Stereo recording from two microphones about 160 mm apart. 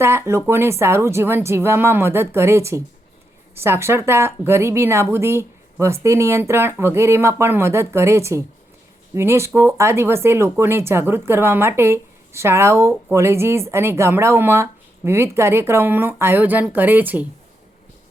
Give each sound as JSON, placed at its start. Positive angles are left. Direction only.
{"t": 0.0, "sound": "speech", "side_deg": -15}